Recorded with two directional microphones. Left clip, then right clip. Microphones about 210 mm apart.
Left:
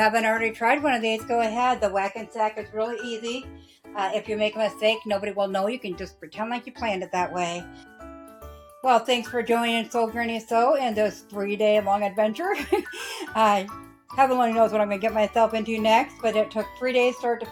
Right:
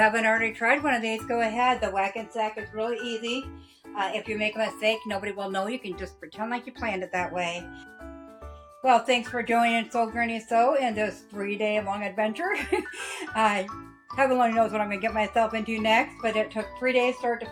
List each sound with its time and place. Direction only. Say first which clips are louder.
0.0 s speech: left 1 dB; 35° left (ahead or behind)
3.9 s speech: left 3 dB; 45° left (ahead or behind)
8.8 s speech: left 1 dB; 45° left (ahead or behind)